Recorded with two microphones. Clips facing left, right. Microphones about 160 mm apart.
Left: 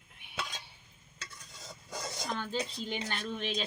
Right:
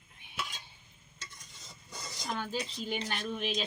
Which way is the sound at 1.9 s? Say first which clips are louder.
Left 6 dB; 75° left (ahead or behind).